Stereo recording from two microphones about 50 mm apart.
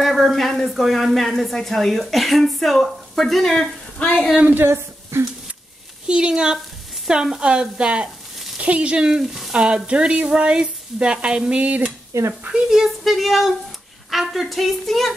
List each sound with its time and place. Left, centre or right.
0.0 s speech: centre
4.4 s a woman's voice: right
5.1 s a sound: right
6.0 s speech: centre
8.5 s frying: right
9.2 s frying: centre
9.5 s frying: centre
12.1 s stir: right
12.6 s speech: centre